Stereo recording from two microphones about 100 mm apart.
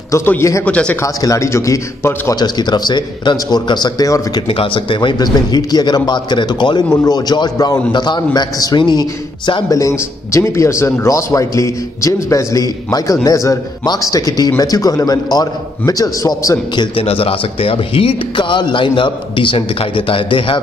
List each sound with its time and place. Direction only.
0.4 s speech: 30° left (ahead or behind)
0.7 s speech: 10° left (ahead or behind)
1.0 s a man's voice: 35° left (ahead or behind)
2.3 s a man's voice: 45° left (ahead or behind)
4.5 s a man's voice: 60° left (ahead or behind); by 9.0 s 45° left (ahead or behind)
9.7 s a man's voice: 35° left (ahead or behind)
16.7 s a man's voice: 50° left (ahead or behind)
17.0 s a man's voice: 70° left (ahead or behind)